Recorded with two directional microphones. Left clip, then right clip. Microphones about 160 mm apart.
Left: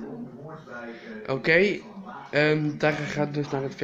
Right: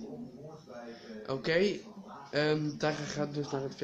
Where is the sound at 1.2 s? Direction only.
10° right (ahead or behind).